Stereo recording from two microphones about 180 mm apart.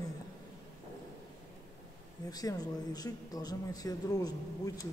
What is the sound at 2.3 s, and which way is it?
Speech, 20° left (ahead or behind).